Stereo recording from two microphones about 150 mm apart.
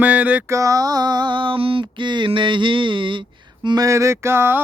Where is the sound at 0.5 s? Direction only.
20° right (ahead or behind).